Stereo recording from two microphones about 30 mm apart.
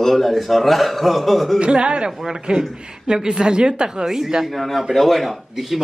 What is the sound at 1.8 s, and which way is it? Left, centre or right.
Speech, right.